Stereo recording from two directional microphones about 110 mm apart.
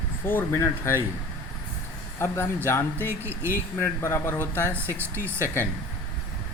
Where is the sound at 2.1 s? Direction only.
25° left (ahead or behind).